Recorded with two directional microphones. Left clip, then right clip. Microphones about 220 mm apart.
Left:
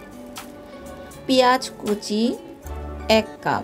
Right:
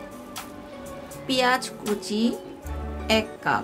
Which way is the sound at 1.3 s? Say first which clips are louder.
Left 5 dB; 15° left (ahead or behind).